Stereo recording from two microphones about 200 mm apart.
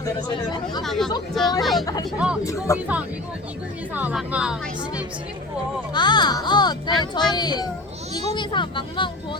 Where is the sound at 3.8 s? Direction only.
10° right (ahead or behind).